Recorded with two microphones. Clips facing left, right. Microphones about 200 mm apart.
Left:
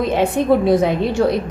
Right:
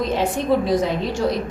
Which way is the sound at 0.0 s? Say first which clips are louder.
Left 4 dB; 60° left (ahead or behind).